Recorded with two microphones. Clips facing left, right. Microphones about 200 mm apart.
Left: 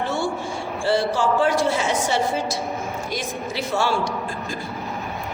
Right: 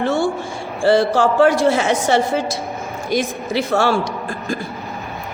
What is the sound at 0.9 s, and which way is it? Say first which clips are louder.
A man's voice: right 6 dB; 90° right.